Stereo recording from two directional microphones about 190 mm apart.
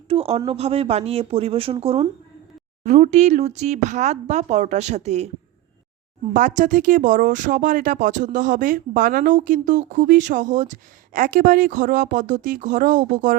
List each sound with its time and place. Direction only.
0.1 s speech: 30° right (ahead or behind)
6.3 s speech: 40° right (ahead or behind)